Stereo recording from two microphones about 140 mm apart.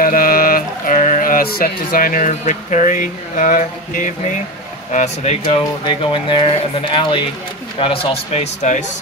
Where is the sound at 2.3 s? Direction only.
55° left (ahead or behind).